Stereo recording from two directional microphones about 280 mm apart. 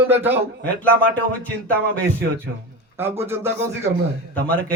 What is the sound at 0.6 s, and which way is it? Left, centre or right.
Speech, centre.